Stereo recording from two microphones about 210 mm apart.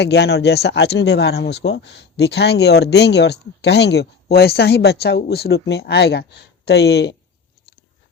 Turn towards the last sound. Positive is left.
turn(degrees=50)  # may be behind; listen again after turning